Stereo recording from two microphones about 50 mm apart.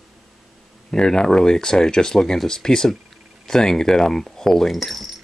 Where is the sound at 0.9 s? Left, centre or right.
Centre.